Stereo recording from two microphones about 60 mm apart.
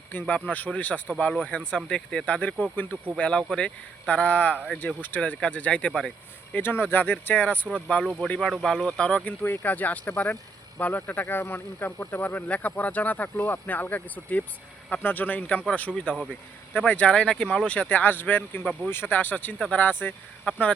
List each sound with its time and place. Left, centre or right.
0.1 s speech: left
3.2 s speech: centre
5.9 s speech: centre
6.5 s speech: left
7.9 s speech: centre
8.4 s speech: centre
9.0 s speech: centre
9.4 s speech: left; by 17.7 s centre
17.7 s speech: left